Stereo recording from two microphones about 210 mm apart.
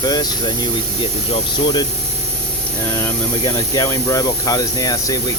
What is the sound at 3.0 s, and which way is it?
Speech, 15° left (ahead or behind).